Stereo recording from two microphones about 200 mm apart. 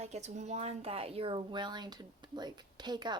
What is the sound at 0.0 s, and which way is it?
Speech, 35° right (ahead or behind).